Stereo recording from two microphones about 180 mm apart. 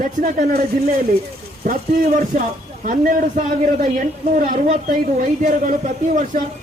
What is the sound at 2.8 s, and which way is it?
A man's voice, 50° right (ahead or behind).